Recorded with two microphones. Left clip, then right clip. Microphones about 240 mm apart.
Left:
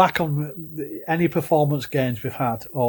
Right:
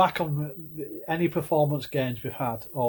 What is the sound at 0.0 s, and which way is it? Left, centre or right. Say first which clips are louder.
Speech: left 5 dB; left.